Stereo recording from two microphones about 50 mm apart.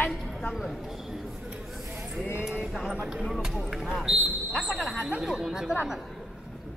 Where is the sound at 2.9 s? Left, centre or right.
Centre.